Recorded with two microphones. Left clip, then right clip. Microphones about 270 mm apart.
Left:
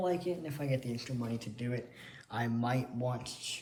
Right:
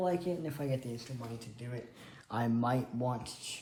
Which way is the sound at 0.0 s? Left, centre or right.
Centre.